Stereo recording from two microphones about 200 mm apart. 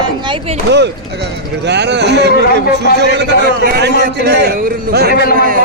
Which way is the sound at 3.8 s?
55° right (ahead or behind).